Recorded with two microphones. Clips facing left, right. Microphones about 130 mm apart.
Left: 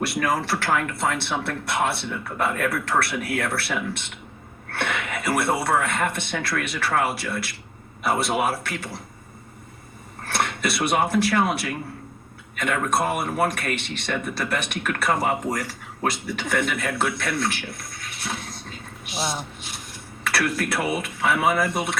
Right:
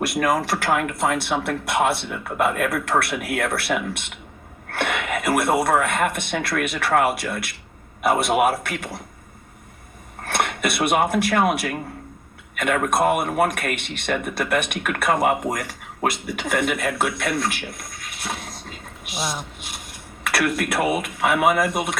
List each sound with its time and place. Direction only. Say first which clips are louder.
0.0 s speech: right 3 dB; 50° right (ahead or behind)
10.2 s speech: right 2 dB; 50° right (ahead or behind)
18.2 s a sound: right 1 dB; 50° right (ahead or behind)
19.1 s speech: even; 25° left (ahead or behind)
20.2 s speech: right 2 dB; 50° right (ahead or behind)